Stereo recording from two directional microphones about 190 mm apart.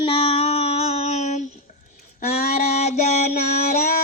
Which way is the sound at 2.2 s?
35° left (ahead or behind).